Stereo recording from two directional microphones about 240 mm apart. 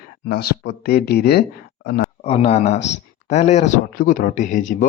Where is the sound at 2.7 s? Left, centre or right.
Left.